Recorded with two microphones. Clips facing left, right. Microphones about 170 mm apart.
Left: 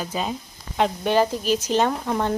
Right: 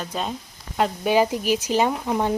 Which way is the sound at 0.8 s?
10° right (ahead or behind).